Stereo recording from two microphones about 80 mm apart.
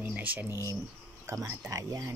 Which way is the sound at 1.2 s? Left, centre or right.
Right.